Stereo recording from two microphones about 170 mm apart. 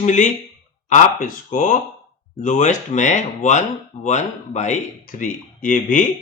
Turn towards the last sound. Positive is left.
turn(degrees=50)  # may be behind; listen again after turning